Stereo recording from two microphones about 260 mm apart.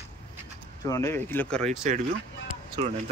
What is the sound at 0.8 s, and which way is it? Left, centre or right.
Speech, centre.